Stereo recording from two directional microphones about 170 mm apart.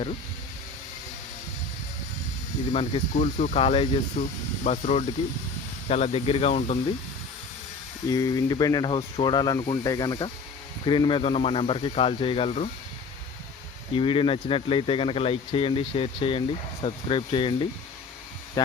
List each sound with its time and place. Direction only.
2.7 s speech: 40° left (ahead or behind)
8.1 s speech: 20° left (ahead or behind); by 12.7 s 40° left (ahead or behind)
13.9 s speech: 30° left (ahead or behind)